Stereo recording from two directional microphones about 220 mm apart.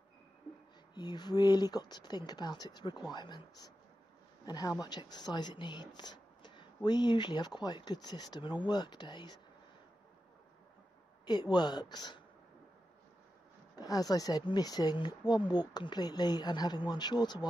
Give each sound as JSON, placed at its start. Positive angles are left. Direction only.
{"t": 0.9, "sound": "speech", "side_deg": 20}
{"t": 11.2, "sound": "speech", "side_deg": 20}
{"t": 13.7, "sound": "speech", "side_deg": 15}